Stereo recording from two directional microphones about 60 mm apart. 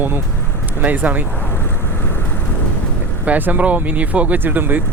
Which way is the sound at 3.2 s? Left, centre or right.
Right.